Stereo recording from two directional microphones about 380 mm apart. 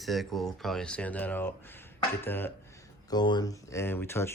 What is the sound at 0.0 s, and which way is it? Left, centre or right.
Speech, centre.